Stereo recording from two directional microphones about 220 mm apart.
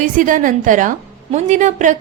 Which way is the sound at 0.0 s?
35° right (ahead or behind).